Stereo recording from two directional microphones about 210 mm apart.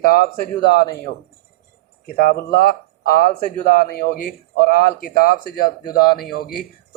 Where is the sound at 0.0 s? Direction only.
45° left (ahead or behind).